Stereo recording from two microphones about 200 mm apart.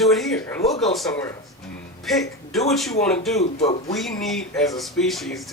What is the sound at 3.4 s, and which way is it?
Speech, 30° left (ahead or behind).